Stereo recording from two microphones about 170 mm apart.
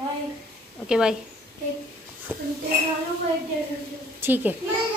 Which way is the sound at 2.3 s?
10° right (ahead or behind).